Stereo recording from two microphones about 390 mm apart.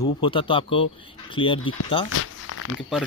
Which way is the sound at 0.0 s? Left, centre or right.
Centre.